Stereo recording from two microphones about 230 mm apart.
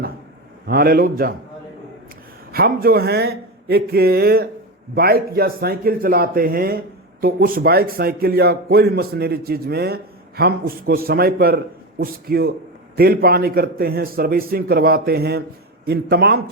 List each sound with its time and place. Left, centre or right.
0.7 s speech: right
2.5 s speech: right